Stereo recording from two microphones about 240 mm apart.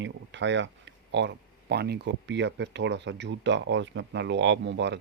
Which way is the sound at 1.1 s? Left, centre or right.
Right.